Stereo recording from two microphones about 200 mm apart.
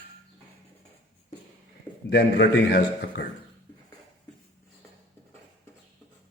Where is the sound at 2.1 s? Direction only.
60° left (ahead or behind).